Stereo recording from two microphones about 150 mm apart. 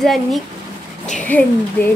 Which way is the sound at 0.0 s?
Centre (ahead or behind).